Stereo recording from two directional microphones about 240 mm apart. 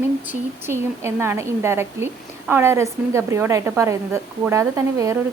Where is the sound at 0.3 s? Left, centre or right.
Centre.